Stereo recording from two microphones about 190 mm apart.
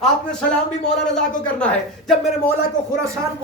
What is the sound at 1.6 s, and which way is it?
Speech, centre (ahead or behind).